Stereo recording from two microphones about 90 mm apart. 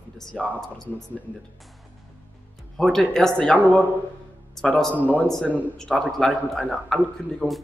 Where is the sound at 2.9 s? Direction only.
5° left (ahead or behind).